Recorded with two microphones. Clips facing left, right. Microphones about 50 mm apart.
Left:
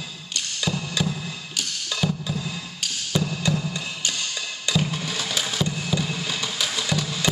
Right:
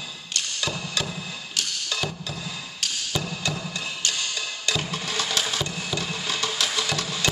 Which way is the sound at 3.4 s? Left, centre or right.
Centre.